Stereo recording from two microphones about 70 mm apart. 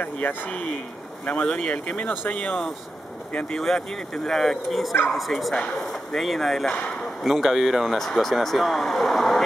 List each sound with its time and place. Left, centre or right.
0.0 s speech: left; by 9.4 s centre